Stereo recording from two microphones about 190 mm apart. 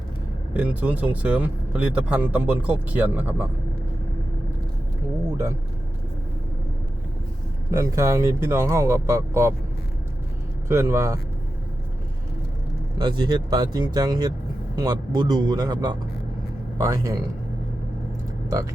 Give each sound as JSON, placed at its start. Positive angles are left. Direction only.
{"t": 0.5, "sound": "speech", "side_deg": -5}
{"t": 7.7, "sound": "speech", "side_deg": -15}
{"t": 10.7, "sound": "speech", "side_deg": -15}
{"t": 13.0, "sound": "a man's voice", "side_deg": -25}